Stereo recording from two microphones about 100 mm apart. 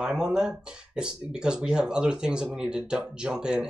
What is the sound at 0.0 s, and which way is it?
Speech, 5° right (ahead or behind).